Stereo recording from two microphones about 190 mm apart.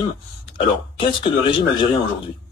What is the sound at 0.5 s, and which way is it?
A man's voice, 25° left (ahead or behind).